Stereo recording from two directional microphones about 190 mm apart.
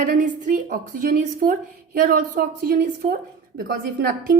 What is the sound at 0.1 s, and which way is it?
Speech, 45° right (ahead or behind).